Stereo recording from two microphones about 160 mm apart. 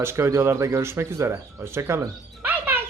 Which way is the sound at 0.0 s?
15° right (ahead or behind).